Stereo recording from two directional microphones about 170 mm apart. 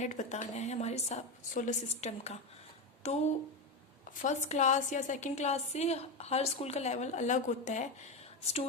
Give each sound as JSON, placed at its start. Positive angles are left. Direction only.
{"t": 0.0, "sound": "a woman's voice", "side_deg": 45}